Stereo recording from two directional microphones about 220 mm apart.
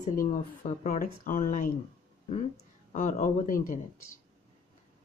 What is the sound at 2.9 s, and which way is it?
Speech, 35° left (ahead or behind).